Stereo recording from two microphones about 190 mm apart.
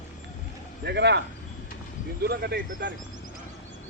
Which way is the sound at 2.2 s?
55° right (ahead or behind).